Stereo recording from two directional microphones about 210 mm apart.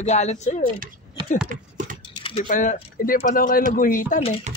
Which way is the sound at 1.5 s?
40° right (ahead or behind).